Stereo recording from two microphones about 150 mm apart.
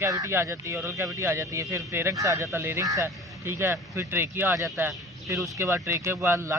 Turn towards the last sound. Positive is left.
turn(degrees=-15)  # may be behind; listen again after turning